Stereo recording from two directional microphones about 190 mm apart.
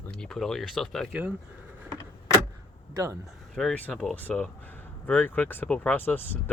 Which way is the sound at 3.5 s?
5° left (ahead or behind).